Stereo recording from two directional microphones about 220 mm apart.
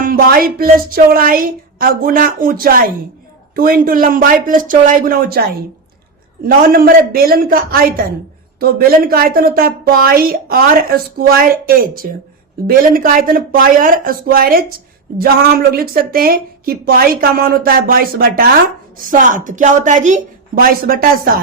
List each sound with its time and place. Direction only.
0.0 s a woman's voice: 40° right (ahead or behind)